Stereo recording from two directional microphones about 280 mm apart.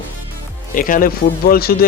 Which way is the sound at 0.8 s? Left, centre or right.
Left.